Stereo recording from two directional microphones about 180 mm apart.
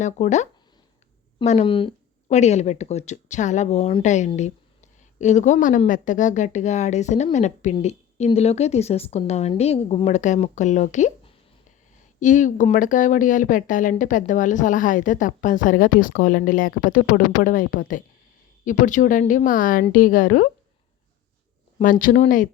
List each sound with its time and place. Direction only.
0.0 s a woman's voice: 40° left (ahead or behind)
1.5 s speech: 35° left (ahead or behind)
2.3 s a woman's voice: 40° left (ahead or behind)
21.8 s speech: 50° left (ahead or behind)